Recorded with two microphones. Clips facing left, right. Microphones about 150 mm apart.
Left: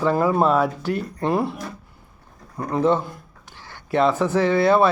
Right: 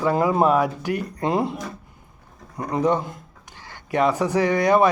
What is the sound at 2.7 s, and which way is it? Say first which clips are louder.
Speech: left 1 dB; 15° right (ahead or behind).